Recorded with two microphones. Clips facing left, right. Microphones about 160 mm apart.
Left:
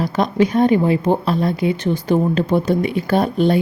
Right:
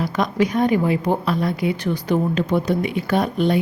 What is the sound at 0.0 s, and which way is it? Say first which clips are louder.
A woman's voice: left 3 dB; 30° left (ahead or behind).